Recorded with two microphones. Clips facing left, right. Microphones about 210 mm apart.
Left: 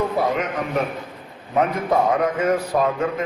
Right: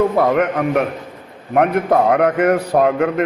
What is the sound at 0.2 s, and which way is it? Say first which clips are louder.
A man's voice: right 7 dB; 60° right (ahead or behind).